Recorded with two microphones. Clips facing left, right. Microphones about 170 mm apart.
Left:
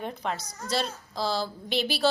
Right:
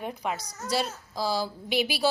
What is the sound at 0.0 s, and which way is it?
A woman's voice, 10° right (ahead or behind).